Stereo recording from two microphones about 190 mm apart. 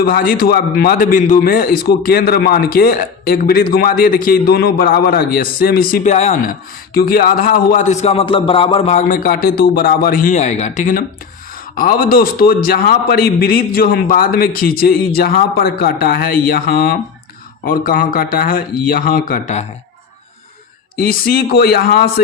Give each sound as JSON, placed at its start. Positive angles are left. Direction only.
{"t": 0.0, "sound": "a man's voice", "side_deg": 50}
{"t": 6.9, "sound": "a man's voice", "side_deg": 50}
{"t": 20.9, "sound": "a man's voice", "side_deg": 50}